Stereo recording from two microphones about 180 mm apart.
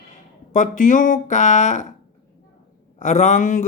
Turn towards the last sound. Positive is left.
turn(degrees=45)  # may be behind; listen again after turning